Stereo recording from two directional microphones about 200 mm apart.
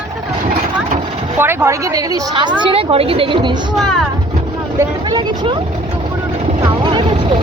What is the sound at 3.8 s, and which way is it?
Speech, centre (ahead or behind).